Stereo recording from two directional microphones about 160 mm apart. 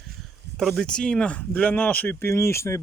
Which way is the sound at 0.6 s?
Centre (ahead or behind).